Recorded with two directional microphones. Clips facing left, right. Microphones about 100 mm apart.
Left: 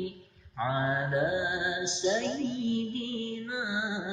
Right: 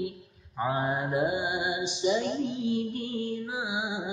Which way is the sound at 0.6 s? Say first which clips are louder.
Right 1 dB; 20° right (ahead or behind).